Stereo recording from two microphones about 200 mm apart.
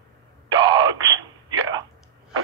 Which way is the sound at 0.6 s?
20° right (ahead or behind).